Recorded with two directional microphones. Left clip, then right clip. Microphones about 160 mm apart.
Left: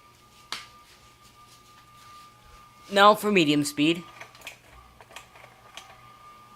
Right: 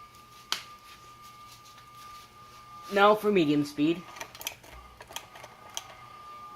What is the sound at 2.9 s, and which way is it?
Speech, 35° left (ahead or behind).